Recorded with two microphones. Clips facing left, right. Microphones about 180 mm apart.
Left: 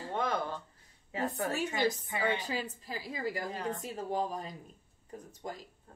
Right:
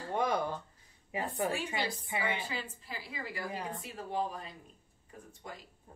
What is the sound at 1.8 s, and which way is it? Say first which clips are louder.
A woman's voice: left 4 dB; 45° left (ahead or behind).